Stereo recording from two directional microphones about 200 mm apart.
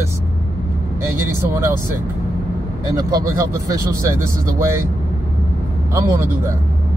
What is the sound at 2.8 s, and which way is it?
Speech, 20° right (ahead or behind).